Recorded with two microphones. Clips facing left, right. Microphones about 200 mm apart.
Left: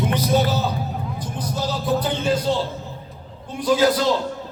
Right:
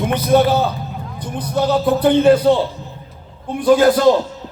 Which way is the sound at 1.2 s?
60° right (ahead or behind).